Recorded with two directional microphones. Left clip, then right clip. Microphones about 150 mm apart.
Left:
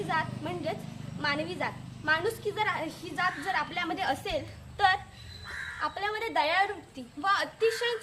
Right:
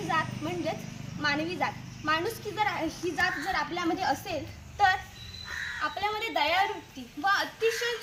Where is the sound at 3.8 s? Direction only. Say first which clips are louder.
Right 2 dB; 25° left (ahead or behind).